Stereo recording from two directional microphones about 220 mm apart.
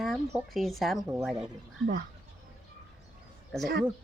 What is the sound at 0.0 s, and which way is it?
Speech, centre (ahead or behind).